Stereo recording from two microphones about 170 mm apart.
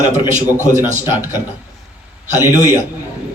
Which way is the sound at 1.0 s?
15° right (ahead or behind).